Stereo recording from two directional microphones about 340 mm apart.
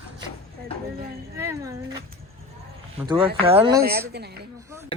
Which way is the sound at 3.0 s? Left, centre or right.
Centre.